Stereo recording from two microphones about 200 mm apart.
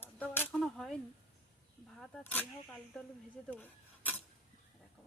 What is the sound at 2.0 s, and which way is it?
Speech, 5° left (ahead or behind).